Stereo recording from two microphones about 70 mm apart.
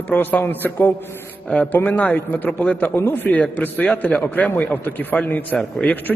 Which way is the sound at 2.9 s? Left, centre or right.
Left.